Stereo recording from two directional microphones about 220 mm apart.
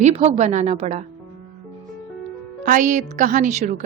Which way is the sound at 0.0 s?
30° right (ahead or behind).